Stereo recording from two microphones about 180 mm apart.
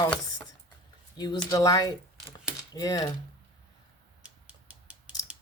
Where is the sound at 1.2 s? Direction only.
20° left (ahead or behind).